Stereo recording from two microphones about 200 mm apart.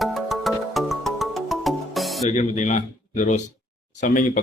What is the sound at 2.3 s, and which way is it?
A man's voice, 35° left (ahead or behind).